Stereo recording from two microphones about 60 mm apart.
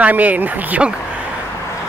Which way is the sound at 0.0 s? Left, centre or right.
Right.